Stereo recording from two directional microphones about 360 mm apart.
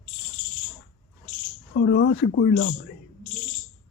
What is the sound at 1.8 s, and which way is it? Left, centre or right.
Speech, left.